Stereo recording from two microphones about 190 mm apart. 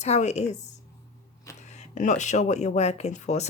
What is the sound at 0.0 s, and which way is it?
Speech, 35° left (ahead or behind).